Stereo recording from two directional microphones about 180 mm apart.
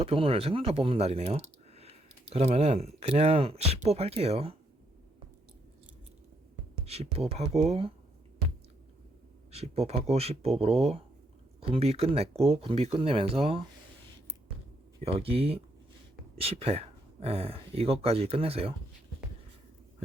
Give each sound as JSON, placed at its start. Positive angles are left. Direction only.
{"t": 0.0, "sound": "speech", "side_deg": -30}
{"t": 6.8, "sound": "speech", "side_deg": -35}
{"t": 9.5, "sound": "speech", "side_deg": -35}
{"t": 15.0, "sound": "speech", "side_deg": -35}